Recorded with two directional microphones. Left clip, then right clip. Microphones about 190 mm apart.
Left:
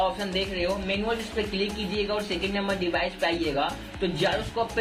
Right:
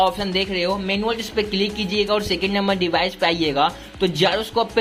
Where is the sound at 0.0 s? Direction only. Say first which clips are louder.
Right 7 dB; 40° right (ahead or behind).